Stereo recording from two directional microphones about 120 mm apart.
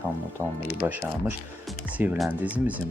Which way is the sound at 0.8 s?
20° right (ahead or behind).